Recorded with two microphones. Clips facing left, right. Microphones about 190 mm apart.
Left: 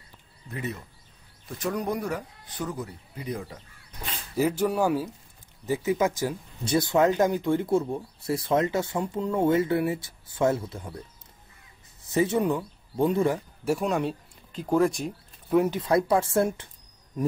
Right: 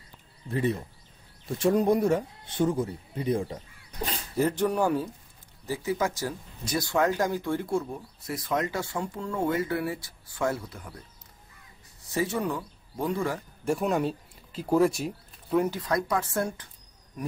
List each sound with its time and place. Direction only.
0.5 s speech: 30° right (ahead or behind)
4.4 s speech: 10° left (ahead or behind)
5.7 s speech: 20° left (ahead or behind)
12.1 s speech: 20° left (ahead or behind)
13.7 s speech: centre (ahead or behind)
15.7 s speech: 25° left (ahead or behind)